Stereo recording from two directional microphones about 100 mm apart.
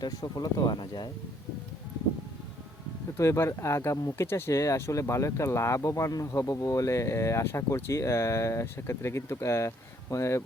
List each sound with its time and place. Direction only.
0.0 s speech: 45° left (ahead or behind)
3.2 s speech: 30° left (ahead or behind)